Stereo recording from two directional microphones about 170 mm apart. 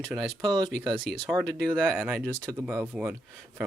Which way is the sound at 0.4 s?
20° right (ahead or behind).